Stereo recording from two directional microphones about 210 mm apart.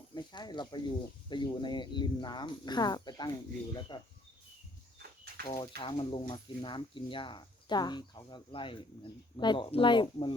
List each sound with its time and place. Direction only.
0.1 s speech: 20° left (ahead or behind)
5.5 s speech: 25° left (ahead or behind)